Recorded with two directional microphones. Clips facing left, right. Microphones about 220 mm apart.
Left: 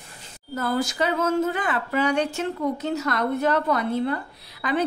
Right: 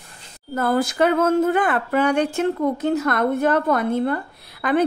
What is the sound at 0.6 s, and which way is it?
Speech, 55° right (ahead or behind).